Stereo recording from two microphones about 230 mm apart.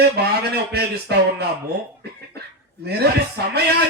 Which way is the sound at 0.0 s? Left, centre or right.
Right.